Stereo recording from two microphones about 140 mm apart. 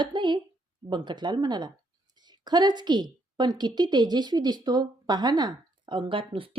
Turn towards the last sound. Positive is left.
turn(degrees=-40)  # may be behind; listen again after turning